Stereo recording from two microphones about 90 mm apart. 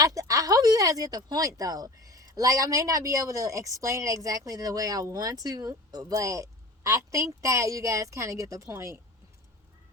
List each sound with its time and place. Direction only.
0.0 s speech: 40° right (ahead or behind)